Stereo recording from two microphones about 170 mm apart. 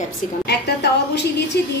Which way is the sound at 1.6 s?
75° left (ahead or behind).